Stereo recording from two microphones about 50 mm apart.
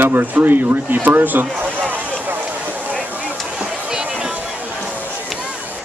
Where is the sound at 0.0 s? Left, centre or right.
Right.